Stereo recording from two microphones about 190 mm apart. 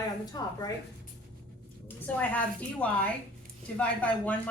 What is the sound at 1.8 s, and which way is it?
A woman's voice, 10° left (ahead or behind).